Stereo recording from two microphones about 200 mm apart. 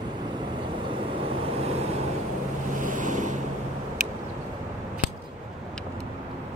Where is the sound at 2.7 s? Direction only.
40° right (ahead or behind).